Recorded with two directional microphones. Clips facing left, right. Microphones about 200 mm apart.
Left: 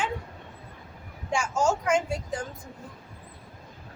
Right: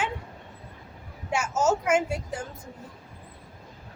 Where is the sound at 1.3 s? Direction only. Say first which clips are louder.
Right 1 dB; 5° right (ahead or behind).